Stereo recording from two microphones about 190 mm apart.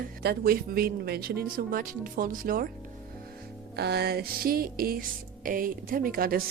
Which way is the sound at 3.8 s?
60° right (ahead or behind).